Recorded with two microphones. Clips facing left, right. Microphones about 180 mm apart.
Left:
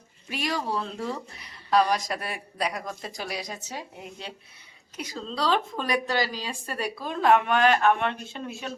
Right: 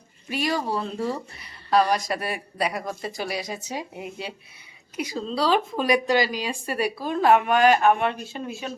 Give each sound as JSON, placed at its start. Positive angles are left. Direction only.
{"t": 0.3, "sound": "speech", "side_deg": 0}
{"t": 3.6, "sound": "speech", "side_deg": -15}